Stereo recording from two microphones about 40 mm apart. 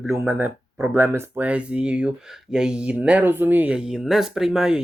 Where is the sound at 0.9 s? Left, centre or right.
Right.